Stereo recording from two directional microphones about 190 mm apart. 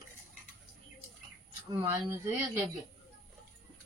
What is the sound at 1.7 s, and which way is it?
Speech, 20° right (ahead or behind).